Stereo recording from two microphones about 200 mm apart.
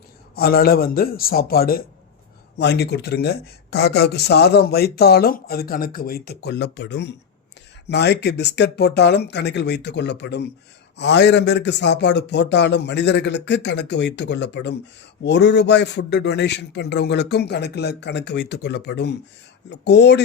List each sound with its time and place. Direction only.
0.3 s a man's voice: 50° left (ahead or behind)